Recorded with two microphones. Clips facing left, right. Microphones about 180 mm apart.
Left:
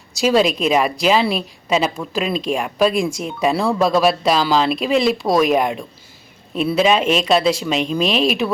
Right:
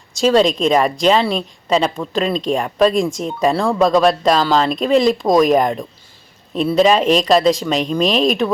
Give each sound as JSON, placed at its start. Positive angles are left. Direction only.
{"t": 0.2, "sound": "a woman's voice", "side_deg": 10}
{"t": 2.9, "sound": "speech", "side_deg": -35}
{"t": 3.4, "sound": "speech", "side_deg": 5}